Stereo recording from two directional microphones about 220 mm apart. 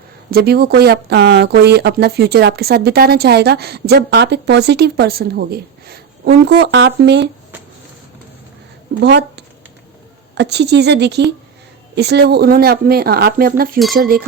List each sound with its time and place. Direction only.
0.3 s speech: 45° right (ahead or behind)
9.0 s speech: 50° right (ahead or behind)